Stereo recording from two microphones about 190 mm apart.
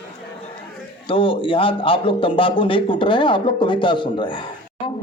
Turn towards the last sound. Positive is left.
turn(degrees=25)  # may be behind; listen again after turning